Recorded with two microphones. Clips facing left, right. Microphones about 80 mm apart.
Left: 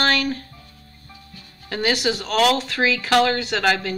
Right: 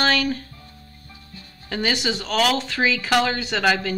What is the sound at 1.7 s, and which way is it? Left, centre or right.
Speech, centre.